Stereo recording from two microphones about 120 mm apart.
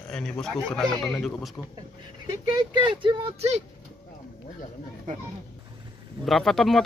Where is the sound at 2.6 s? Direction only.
40° right (ahead or behind).